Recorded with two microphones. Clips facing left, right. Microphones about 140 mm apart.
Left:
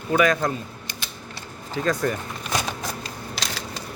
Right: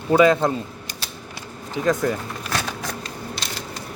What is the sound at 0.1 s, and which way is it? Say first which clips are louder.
Speech: right 5 dB; 25° right (ahead or behind).